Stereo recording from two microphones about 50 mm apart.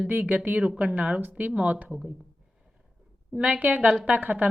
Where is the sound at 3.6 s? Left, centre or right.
Right.